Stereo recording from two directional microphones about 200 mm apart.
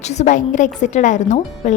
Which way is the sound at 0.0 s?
35° left (ahead or behind).